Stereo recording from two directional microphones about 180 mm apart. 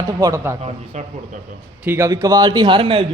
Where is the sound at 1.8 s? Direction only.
15° right (ahead or behind).